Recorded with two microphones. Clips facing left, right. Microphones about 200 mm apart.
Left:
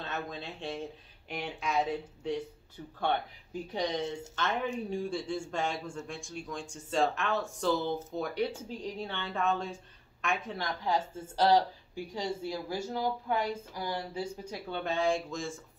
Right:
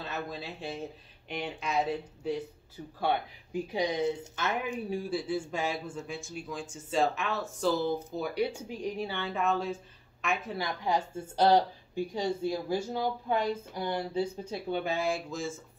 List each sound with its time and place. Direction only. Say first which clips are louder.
0.0 s speech: right 1 dB; 5° right (ahead or behind)
10.8 s a woman's voice: even; 15° right (ahead or behind)
14.7 s speech: left 1 dB; 10° right (ahead or behind)